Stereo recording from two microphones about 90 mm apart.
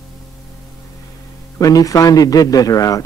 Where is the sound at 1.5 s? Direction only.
40° left (ahead or behind).